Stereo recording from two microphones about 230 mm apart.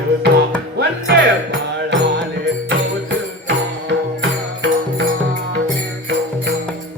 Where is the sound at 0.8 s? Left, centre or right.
Right.